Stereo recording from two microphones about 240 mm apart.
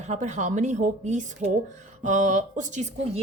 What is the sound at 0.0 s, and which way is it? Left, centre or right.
Speech, right.